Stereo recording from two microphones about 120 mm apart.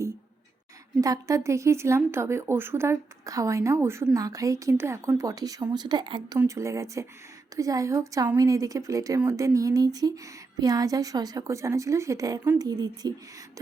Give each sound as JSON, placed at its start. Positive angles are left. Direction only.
{"t": 1.0, "sound": "speech", "side_deg": -30}
{"t": 6.4, "sound": "speech", "side_deg": -25}